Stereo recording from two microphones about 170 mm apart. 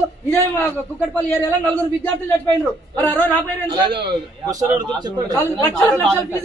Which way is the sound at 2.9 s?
10° left (ahead or behind).